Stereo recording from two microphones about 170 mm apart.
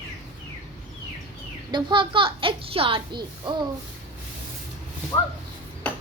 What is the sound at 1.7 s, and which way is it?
A woman's voice, 30° right (ahead or behind).